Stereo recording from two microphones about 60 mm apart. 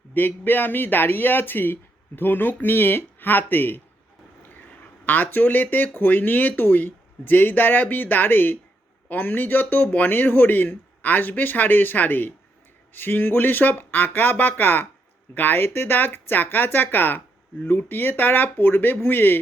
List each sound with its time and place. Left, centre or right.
0.1 s speech: left
5.0 s speech: left